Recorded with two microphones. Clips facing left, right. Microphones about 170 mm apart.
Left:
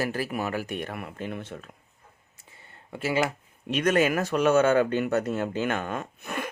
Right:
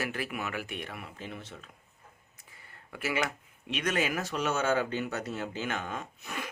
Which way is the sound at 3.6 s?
45° left (ahead or behind).